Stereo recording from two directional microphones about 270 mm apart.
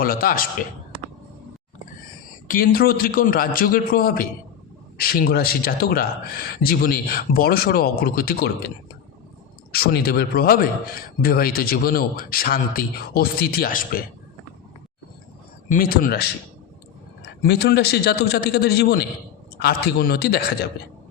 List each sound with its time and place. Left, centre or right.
0.0 s a man's voice: left
2.5 s a man's voice: left
9.7 s a man's voice: left
15.7 s a man's voice: left